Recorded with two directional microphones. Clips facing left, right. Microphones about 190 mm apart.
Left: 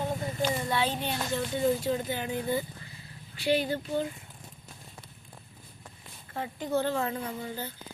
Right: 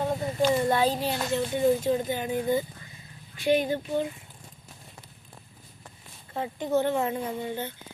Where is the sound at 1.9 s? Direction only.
15° right (ahead or behind).